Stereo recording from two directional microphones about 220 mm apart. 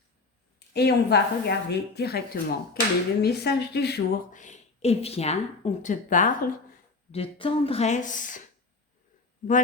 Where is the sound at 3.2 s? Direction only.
50° left (ahead or behind).